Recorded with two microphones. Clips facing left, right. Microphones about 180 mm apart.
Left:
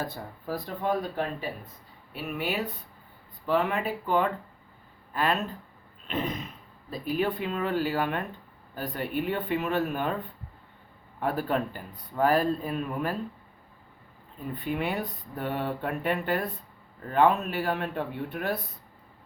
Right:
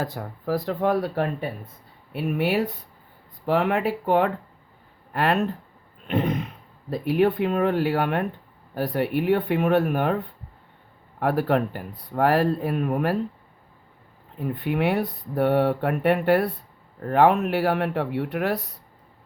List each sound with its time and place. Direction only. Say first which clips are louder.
0.0 s speech: right 5 dB; 90° right; by 2.6 s 60° right (ahead or behind)
3.4 s speech: right 5 dB; 75° right (ahead or behind)
6.1 s a sound: right 7 dB; 60° right (ahead or behind)
6.9 s speech: right 7 dB; 65° right (ahead or behind)
14.3 s speech: right 6 dB; 70° right (ahead or behind)